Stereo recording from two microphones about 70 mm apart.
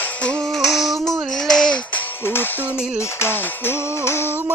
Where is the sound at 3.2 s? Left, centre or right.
Left.